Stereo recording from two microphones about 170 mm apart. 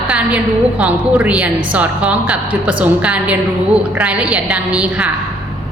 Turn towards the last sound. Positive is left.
turn(degrees=-5)  # may be behind; listen again after turning